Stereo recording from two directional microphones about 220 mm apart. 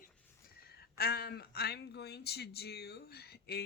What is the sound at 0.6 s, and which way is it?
Speech, 45° left (ahead or behind).